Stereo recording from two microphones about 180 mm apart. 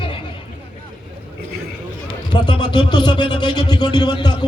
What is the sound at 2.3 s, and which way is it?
Speech, 25° left (ahead or behind).